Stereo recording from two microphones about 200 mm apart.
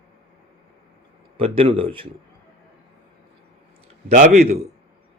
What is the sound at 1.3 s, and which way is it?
Speech, 30° right (ahead or behind).